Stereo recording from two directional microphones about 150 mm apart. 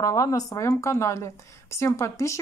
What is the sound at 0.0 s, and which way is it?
Speech, 20° left (ahead or behind).